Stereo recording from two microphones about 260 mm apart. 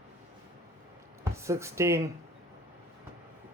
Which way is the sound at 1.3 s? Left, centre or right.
Centre.